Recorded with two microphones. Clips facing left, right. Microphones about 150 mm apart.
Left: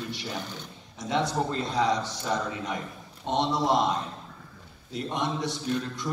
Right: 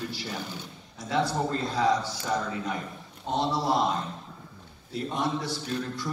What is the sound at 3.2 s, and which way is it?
Speech, 20° left (ahead or behind).